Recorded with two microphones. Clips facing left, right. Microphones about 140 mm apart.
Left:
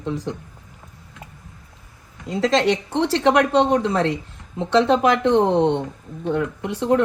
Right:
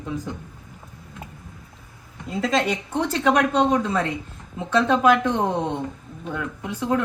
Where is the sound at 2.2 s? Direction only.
90° left.